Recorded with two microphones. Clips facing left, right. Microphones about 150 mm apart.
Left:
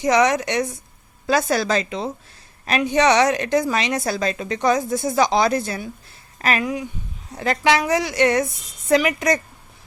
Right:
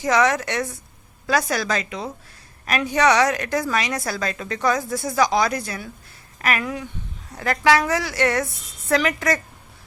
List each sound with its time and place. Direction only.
0.0 s a woman's voice: 20° left (ahead or behind)